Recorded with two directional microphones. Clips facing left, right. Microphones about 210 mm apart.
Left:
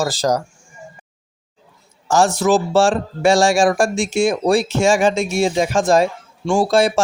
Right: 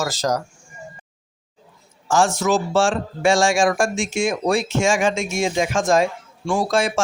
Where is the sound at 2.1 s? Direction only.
35° left (ahead or behind).